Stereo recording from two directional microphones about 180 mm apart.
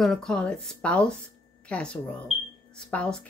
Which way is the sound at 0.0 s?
5° left (ahead or behind).